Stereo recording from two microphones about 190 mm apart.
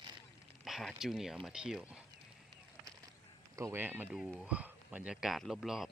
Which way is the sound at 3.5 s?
15° right (ahead or behind).